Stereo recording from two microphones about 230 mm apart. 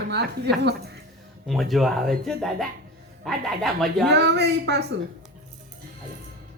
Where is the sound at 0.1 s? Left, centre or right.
Right.